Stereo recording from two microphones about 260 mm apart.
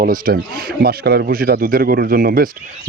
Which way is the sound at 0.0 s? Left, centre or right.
Right.